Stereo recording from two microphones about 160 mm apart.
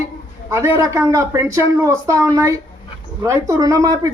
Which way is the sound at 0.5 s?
15° right (ahead or behind).